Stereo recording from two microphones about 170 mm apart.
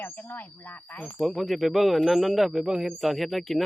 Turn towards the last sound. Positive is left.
turn(degrees=0)  # may be behind; listen again after turning